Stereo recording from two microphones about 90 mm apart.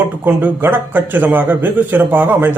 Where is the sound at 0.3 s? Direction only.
20° right (ahead or behind).